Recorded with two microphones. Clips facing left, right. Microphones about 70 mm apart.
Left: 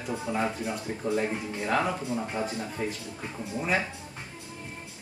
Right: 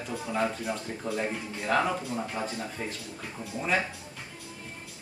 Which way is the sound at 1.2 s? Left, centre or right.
Centre.